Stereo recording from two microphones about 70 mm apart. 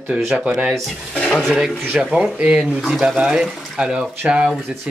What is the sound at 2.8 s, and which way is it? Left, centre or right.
Speech, centre.